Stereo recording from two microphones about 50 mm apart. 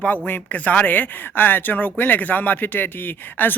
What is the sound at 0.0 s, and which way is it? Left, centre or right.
Speech, left.